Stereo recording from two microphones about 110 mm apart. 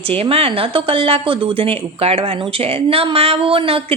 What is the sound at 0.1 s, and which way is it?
A woman's voice, 60° right (ahead or behind).